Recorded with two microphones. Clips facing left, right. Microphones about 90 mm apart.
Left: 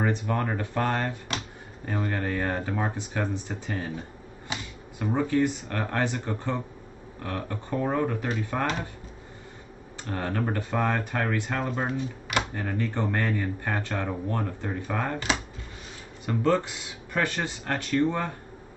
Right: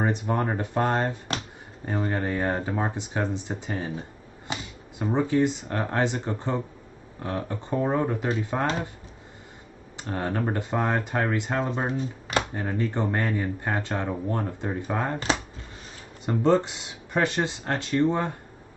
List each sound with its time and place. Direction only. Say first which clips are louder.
0.0 s speech: right 1 dB; 25° right (ahead or behind)
5.1 s speech: right 2 dB; 20° right (ahead or behind)
10.0 s speech: right 2 dB; 20° right (ahead or behind)